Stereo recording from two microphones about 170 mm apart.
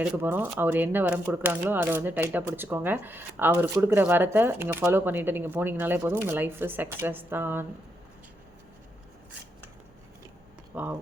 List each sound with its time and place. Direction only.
0.0 s speech: 10° right (ahead or behind)
10.7 s speech: 10° right (ahead or behind)